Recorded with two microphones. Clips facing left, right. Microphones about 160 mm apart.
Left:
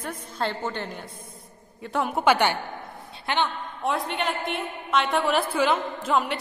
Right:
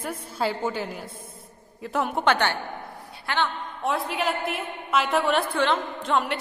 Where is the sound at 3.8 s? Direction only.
Centre (ahead or behind).